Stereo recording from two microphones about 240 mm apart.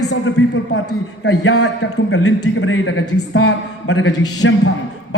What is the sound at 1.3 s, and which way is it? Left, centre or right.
A man's voice, left.